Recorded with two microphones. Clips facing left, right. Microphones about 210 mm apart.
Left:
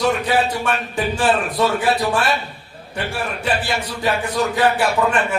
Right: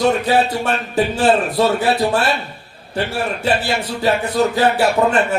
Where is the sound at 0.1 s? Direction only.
40° right (ahead or behind).